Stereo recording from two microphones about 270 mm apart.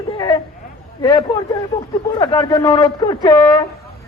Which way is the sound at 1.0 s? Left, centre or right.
Centre.